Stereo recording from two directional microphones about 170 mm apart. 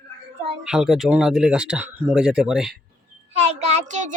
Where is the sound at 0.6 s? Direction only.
5° right (ahead or behind).